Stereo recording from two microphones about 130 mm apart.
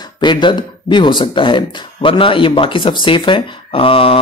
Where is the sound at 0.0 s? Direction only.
35° left (ahead or behind).